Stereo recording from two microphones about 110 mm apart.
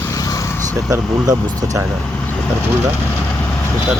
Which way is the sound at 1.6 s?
30° right (ahead or behind).